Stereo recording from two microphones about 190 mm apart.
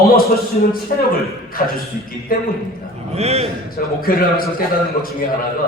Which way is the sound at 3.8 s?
50° left (ahead or behind).